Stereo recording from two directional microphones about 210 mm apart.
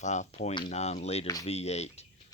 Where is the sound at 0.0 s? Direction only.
35° left (ahead or behind).